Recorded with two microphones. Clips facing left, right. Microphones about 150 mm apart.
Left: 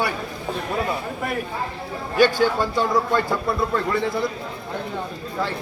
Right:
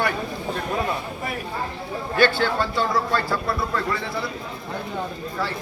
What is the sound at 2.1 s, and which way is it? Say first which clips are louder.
A man's voice: left 3 dB; 10° left (ahead or behind).